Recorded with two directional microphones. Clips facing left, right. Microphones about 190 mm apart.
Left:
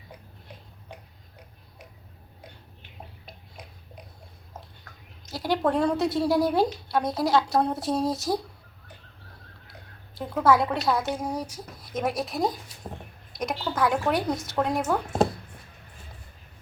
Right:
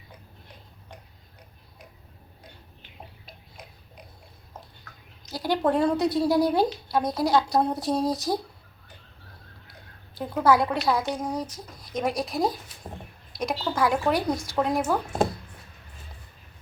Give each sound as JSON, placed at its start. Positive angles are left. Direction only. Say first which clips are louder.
{"t": 5.3, "sound": "a woman's voice", "louder": "right 1 dB", "side_deg": 0}
{"t": 10.2, "sound": "a woman's voice", "louder": "even", "side_deg": 0}